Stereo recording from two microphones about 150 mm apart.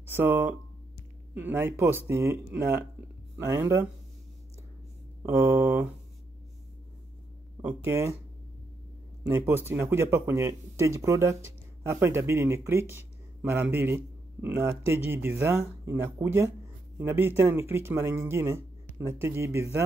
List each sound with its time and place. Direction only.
0.0 s speech: 15° right (ahead or behind)
5.2 s speech: 15° right (ahead or behind)
7.6 s speech: 20° right (ahead or behind)
9.2 s speech: 15° right (ahead or behind)